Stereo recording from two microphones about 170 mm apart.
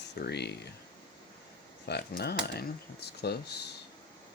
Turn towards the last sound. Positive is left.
turn(degrees=75)  # may be behind; listen again after turning